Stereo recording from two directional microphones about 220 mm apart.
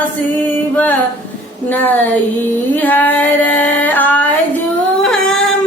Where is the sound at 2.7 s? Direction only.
5° left (ahead or behind).